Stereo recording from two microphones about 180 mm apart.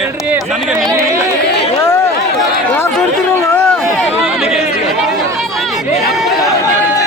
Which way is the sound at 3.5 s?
10° left (ahead or behind).